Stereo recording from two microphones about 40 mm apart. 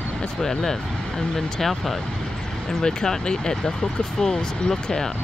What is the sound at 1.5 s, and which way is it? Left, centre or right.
Speech, centre.